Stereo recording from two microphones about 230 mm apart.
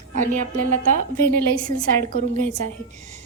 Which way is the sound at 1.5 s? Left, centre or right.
Centre.